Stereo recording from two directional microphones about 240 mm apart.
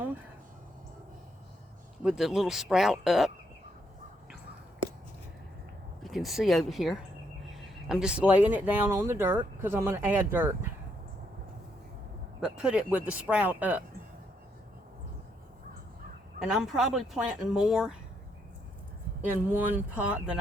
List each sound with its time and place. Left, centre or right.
2.0 s speech: centre
6.0 s speech: centre
12.4 s speech: centre
16.5 s speech: centre
19.3 s speech: centre